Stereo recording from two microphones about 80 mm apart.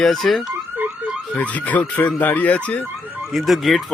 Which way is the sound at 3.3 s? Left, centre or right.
Centre.